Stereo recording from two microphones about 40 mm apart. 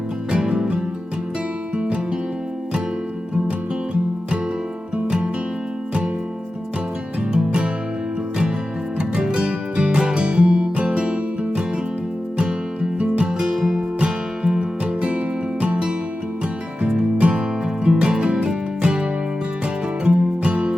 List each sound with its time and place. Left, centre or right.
0.3 s music: right
5.0 s music: right
7.3 s music: right
9.0 s music: right
13.4 s music: centre
17.0 s music: right
20.1 s music: right